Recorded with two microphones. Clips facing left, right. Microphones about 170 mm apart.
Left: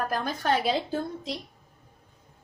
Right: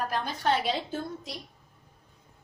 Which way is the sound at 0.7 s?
35° left (ahead or behind).